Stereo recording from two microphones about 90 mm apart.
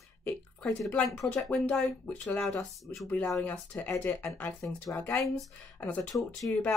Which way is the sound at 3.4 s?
20° left (ahead or behind).